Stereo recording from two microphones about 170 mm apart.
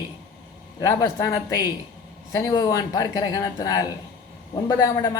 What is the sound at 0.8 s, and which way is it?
Speech, 20° left (ahead or behind).